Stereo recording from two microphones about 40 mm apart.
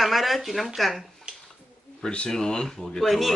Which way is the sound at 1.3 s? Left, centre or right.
Right.